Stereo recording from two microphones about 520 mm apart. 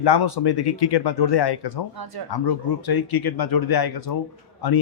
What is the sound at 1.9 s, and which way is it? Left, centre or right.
Speech, right.